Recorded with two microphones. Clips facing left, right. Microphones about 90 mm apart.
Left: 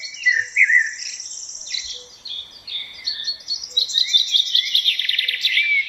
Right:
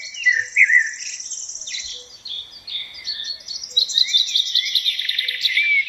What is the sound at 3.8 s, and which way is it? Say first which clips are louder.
Chirp: right 1 dB; 20° right (ahead or behind).